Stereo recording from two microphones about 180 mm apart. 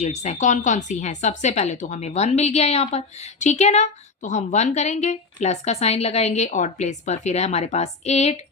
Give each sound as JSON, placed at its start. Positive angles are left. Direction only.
{"t": 0.0, "sound": "a woman's voice", "side_deg": 40}